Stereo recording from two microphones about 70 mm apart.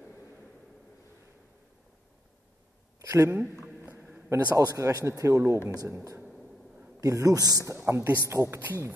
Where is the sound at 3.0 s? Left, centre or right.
Right.